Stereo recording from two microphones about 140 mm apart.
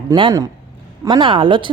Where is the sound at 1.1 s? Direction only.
35° right (ahead or behind).